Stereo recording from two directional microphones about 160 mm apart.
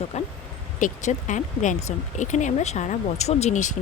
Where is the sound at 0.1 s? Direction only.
45° left (ahead or behind).